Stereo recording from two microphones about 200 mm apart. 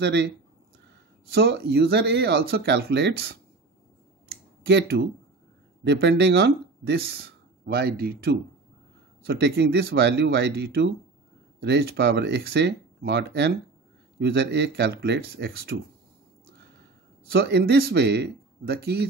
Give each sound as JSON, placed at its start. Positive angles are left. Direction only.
{"t": 0.0, "sound": "speech", "side_deg": -60}
{"t": 1.3, "sound": "speech", "side_deg": -55}
{"t": 4.3, "sound": "a sound", "side_deg": -55}
{"t": 5.9, "sound": "speech", "side_deg": -60}
{"t": 17.3, "sound": "speech", "side_deg": -55}